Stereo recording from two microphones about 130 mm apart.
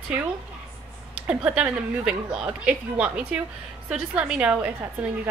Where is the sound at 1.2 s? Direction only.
10° right (ahead or behind).